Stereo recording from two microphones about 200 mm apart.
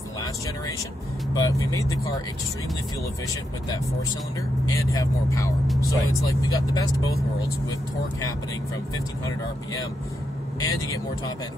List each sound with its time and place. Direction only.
1.3 s speech: 15° left (ahead or behind)
4.7 s speech: 15° left (ahead or behind)
10.6 s speech: 15° left (ahead or behind)